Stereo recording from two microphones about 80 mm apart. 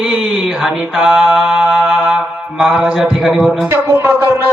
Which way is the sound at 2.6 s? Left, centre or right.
Centre.